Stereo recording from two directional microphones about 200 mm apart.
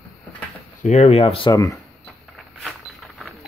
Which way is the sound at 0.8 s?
35° left (ahead or behind).